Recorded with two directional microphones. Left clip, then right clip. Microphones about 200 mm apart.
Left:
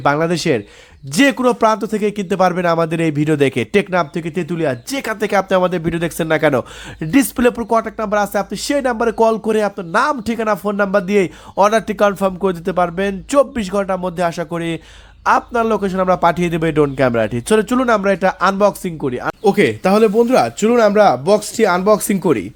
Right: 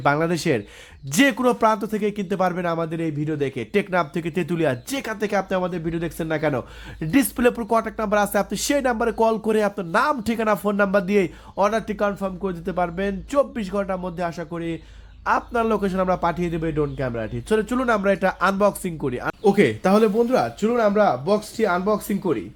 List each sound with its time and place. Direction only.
0.0 s speech: 20° left (ahead or behind)
7.0 s speech: 15° left (ahead or behind); by 22.4 s 55° left (ahead or behind)